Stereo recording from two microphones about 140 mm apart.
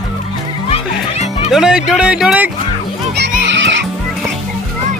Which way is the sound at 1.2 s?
50° left (ahead or behind).